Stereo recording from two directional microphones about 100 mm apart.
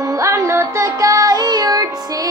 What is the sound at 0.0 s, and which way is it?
Music, 35° right (ahead or behind).